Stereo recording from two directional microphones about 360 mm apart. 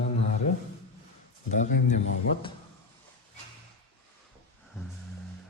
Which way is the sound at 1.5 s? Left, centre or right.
Left.